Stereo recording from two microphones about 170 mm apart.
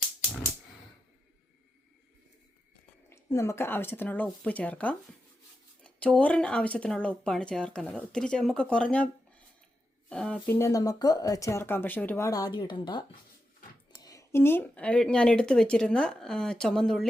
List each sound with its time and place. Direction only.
3.1 s speech: 15° left (ahead or behind)